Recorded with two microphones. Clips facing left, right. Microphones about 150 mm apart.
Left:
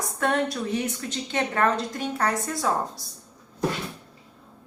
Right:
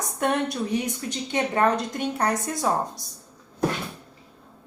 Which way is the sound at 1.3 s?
20° right (ahead or behind).